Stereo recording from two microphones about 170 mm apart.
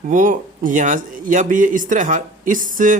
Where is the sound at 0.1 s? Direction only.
50° right (ahead or behind).